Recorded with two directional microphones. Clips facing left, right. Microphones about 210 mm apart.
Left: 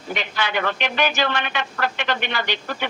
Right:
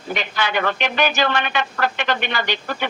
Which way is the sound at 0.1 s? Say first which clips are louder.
Right 2 dB; 45° right (ahead or behind).